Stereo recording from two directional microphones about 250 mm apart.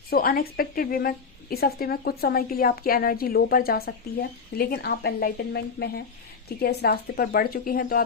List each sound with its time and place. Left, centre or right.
0.1 s speech: left